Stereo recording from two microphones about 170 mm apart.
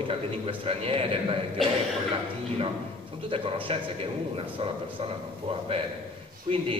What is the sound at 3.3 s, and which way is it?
A man's voice, 30° right (ahead or behind).